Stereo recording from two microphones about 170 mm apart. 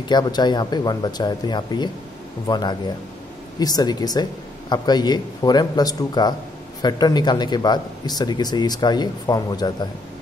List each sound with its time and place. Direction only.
0.0 s speech: 25° left (ahead or behind)